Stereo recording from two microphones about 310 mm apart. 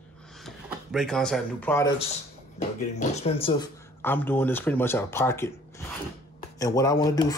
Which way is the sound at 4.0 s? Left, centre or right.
Centre.